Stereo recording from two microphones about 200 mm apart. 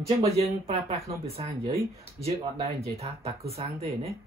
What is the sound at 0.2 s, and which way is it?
Speech, 30° right (ahead or behind).